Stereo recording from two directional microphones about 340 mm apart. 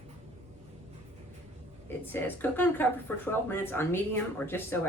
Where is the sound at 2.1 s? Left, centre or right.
Centre.